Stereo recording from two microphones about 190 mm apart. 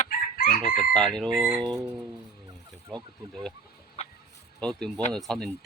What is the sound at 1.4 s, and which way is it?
Speech, 25° right (ahead or behind).